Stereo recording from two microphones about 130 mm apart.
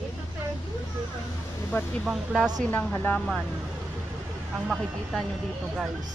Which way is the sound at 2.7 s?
15° left (ahead or behind).